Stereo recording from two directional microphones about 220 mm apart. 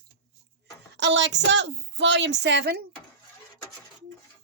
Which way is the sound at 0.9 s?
55° right (ahead or behind).